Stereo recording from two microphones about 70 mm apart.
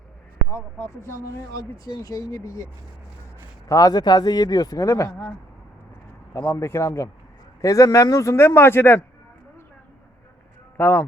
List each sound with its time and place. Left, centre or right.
0.5 s speech: left
1.5 s speech: left
3.7 s speech: left
6.6 s a man's voice: left
10.8 s speech: left